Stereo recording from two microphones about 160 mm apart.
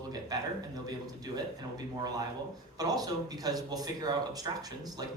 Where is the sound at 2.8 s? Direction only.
25° right (ahead or behind).